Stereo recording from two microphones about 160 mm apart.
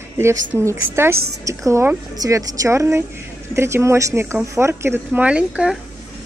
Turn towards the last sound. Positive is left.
turn(degrees=-5)  # may be behind; listen again after turning